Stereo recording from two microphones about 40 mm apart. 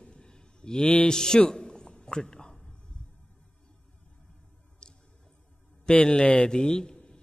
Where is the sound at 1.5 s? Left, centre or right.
Centre.